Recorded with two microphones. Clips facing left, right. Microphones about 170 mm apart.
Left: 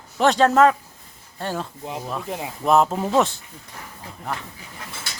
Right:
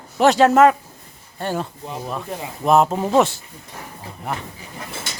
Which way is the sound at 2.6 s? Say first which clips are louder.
Right 2 dB; 5° right (ahead or behind).